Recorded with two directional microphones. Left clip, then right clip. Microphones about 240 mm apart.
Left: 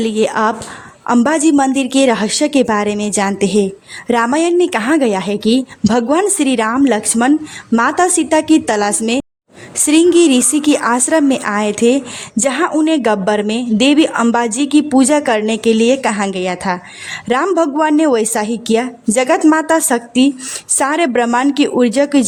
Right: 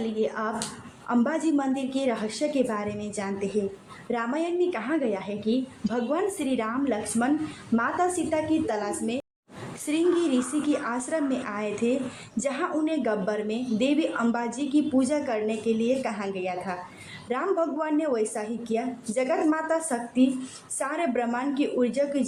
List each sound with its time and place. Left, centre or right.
0.0 s a woman's voice: left